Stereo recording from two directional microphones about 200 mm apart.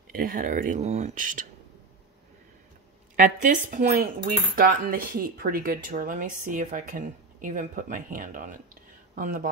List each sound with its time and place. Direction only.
0.1 s speech: 45° right (ahead or behind)
3.2 s speech: 40° right (ahead or behind)